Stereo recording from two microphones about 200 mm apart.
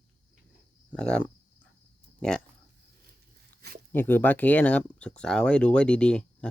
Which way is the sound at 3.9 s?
10° left (ahead or behind).